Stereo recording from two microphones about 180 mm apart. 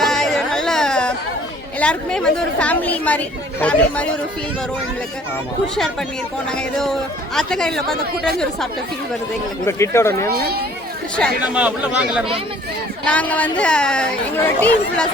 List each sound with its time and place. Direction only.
0.0 s a sound: centre (ahead or behind)
1.8 s speech: 5° left (ahead or behind)
5.7 s speech: centre (ahead or behind)
9.6 s speech: 15° left (ahead or behind)
10.2 s speech: 60° right (ahead or behind)
11.4 s speech: 5° right (ahead or behind)
13.1 s speech: 10° left (ahead or behind)